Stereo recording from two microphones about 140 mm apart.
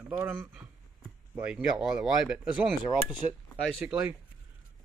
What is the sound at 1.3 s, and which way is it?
Speech, 10° right (ahead or behind).